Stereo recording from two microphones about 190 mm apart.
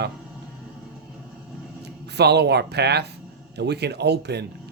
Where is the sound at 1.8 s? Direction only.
60° right (ahead or behind).